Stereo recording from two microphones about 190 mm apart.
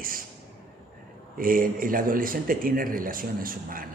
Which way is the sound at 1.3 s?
50° right (ahead or behind).